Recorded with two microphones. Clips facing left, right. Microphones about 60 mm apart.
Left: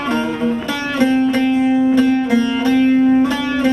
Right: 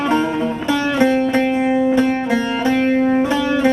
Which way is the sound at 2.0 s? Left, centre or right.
Right.